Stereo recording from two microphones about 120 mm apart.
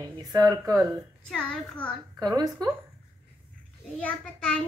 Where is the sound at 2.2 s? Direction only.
30° right (ahead or behind).